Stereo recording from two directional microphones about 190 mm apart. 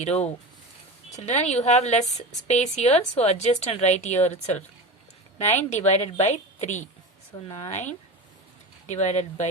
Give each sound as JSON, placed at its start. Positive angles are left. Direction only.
{"t": 0.0, "sound": "a woman's voice", "side_deg": 35}